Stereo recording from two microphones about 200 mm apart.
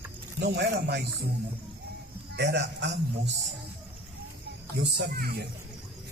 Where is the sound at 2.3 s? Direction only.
55° right (ahead or behind).